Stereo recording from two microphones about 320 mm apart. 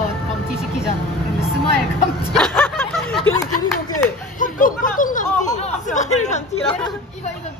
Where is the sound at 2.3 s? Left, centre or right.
Centre.